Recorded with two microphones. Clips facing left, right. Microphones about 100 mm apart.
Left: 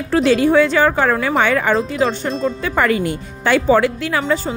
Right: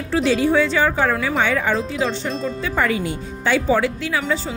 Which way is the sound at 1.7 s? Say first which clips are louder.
Left 4 dB; 45° left (ahead or behind).